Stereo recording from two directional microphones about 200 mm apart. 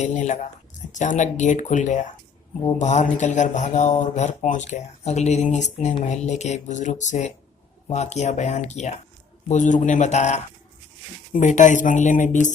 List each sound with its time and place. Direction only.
0.0 s speech: 35° left (ahead or behind)